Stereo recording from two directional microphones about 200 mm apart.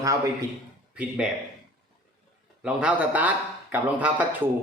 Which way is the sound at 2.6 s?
5° right (ahead or behind).